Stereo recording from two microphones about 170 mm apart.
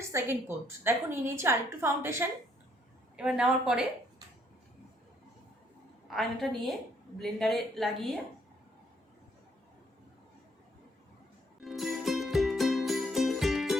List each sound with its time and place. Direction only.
0.1 s a woman's voice: 15° right (ahead or behind)
6.1 s a woman's voice: centre (ahead or behind)
11.6 s music: centre (ahead or behind)